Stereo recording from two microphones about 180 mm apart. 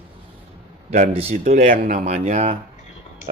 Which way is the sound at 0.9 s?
35° right (ahead or behind).